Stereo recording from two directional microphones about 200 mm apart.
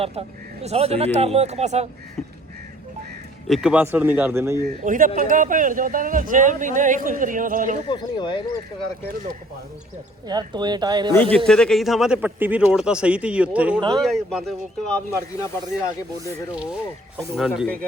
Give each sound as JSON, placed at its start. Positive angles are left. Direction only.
{"t": 0.0, "sound": "speech", "side_deg": -30}
{"t": 3.5, "sound": "speech", "side_deg": -5}
{"t": 4.8, "sound": "speech", "side_deg": -40}
{"t": 7.9, "sound": "speech", "side_deg": 20}
{"t": 10.2, "sound": "speech", "side_deg": -20}
{"t": 11.1, "sound": "speech", "side_deg": 10}
{"t": 14.8, "sound": "speech", "side_deg": 10}
{"t": 17.2, "sound": "speech", "side_deg": 0}